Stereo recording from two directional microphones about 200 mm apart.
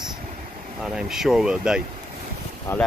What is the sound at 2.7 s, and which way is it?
Speech, 10° left (ahead or behind).